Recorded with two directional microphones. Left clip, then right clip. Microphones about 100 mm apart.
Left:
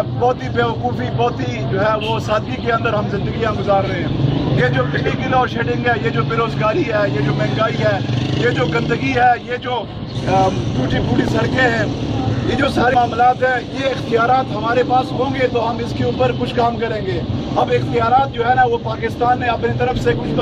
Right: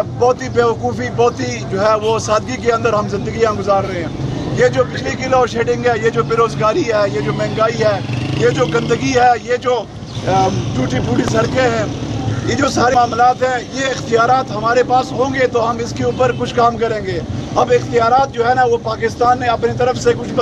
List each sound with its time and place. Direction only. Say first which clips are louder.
0.2 s speech: right 4 dB; 25° right (ahead or behind)